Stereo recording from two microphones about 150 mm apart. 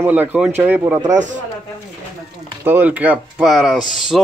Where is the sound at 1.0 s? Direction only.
55° right (ahead or behind).